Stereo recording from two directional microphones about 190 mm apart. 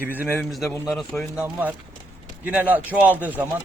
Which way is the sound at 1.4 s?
10° right (ahead or behind).